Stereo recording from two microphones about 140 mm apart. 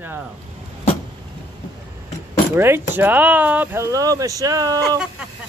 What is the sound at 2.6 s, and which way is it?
Speech, 15° right (ahead or behind).